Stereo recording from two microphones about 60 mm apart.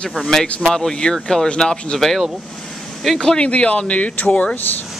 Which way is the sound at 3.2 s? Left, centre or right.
Centre.